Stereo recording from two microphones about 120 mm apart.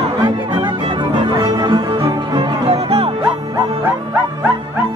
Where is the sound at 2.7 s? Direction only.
60° right (ahead or behind).